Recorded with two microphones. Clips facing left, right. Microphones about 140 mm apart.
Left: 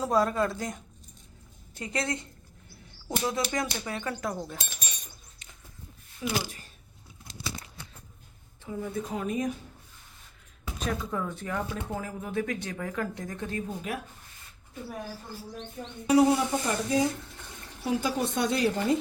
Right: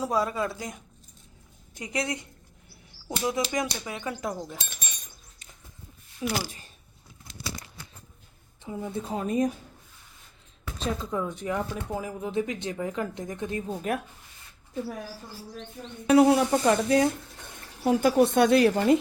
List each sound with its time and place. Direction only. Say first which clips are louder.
0.0 s speech: left 2 dB; 10° right (ahead or behind)
3.2 s speech: right 3 dB; 15° right (ahead or behind)
4.4 s speech: even; centre (ahead or behind)
6.2 s speech: right 1 dB; 20° left (ahead or behind)
8.6 s speech: even; 20° right (ahead or behind); by 9.5 s 35° right (ahead or behind)
10.8 s speech: right 2 dB; 25° right (ahead or behind)
13.9 s speech: right 8 dB; 45° right (ahead or behind)
16.0 s speech: right 3 dB; 65° right (ahead or behind)
17.8 s a woman's voice: right 7 dB; 60° right (ahead or behind)